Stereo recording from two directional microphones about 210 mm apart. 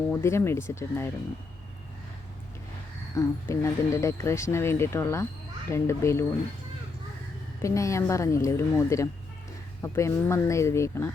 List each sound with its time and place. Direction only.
0.1 s speech: 10° left (ahead or behind)
3.2 s speech: 15° left (ahead or behind)
7.6 s speech: 15° left (ahead or behind)